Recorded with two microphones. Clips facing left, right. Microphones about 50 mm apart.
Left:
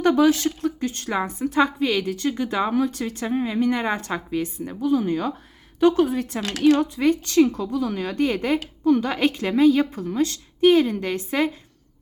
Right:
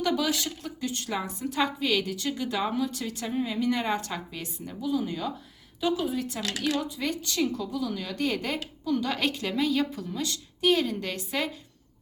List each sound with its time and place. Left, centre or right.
0.0 s speech: left
4.8 s a woman's voice: left